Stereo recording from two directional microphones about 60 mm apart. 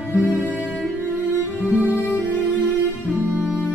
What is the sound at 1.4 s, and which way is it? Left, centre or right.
Music, left.